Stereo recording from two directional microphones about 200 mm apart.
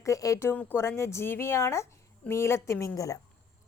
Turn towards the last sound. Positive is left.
turn(degrees=15)  # may be behind; listen again after turning